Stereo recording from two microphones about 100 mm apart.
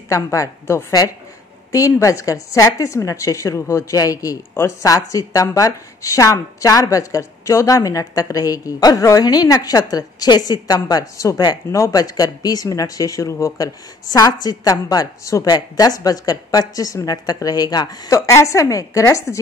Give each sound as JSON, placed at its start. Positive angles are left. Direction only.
{"t": 0.1, "sound": "a woman's voice", "side_deg": 30}